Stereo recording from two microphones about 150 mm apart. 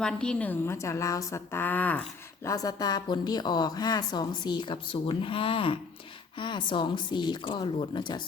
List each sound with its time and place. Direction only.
0.0 s a woman's voice: 5° left (ahead or behind); by 8.2 s 30° left (ahead or behind)